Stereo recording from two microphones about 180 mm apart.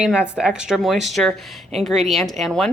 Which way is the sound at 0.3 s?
5° right (ahead or behind).